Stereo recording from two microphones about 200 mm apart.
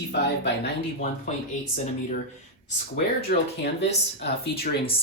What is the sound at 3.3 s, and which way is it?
Speech, 50° left (ahead or behind).